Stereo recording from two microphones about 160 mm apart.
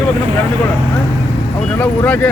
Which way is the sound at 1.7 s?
10° left (ahead or behind).